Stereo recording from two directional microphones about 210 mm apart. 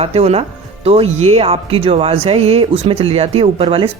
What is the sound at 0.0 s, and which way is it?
Speech, 30° right (ahead or behind).